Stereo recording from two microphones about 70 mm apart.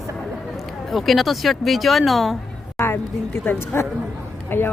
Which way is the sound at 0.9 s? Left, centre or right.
Centre.